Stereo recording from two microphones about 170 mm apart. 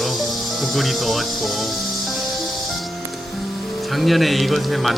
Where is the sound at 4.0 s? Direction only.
Centre (ahead or behind).